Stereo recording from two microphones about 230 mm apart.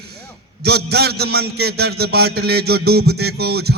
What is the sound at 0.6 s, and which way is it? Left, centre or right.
A man's voice, right.